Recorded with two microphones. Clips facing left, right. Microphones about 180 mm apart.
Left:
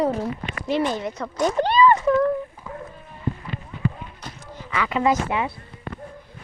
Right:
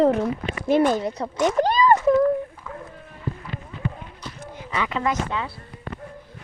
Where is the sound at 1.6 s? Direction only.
40° right (ahead or behind).